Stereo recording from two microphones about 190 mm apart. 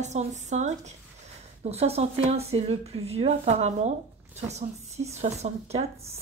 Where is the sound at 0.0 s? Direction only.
35° right (ahead or behind).